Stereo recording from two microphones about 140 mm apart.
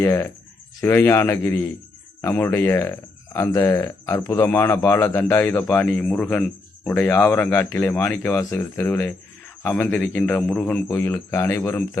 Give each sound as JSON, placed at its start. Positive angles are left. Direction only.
{"t": 0.0, "sound": "speech", "side_deg": 20}